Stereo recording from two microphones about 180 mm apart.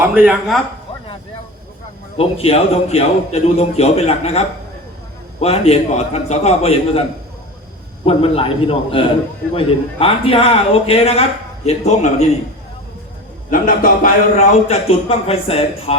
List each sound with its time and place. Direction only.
0.0 s a man's voice: 10° right (ahead or behind)
2.1 s a man's voice: 35° left (ahead or behind)
8.0 s a man's voice: 30° left (ahead or behind)
13.5 s a man's voice: 50° left (ahead or behind); by 16.0 s 35° left (ahead or behind)